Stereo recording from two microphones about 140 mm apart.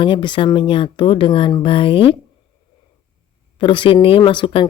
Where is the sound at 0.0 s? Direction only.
35° left (ahead or behind).